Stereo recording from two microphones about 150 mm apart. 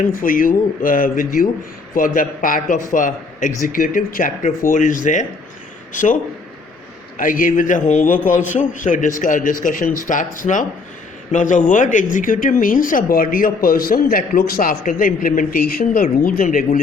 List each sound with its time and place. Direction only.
0.0 s a man's voice: 65° left (ahead or behind)
7.2 s a man's voice: 65° left (ahead or behind)